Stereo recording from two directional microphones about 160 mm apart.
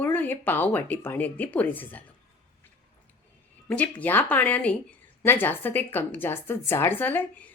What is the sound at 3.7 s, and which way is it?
Speech, 10° left (ahead or behind).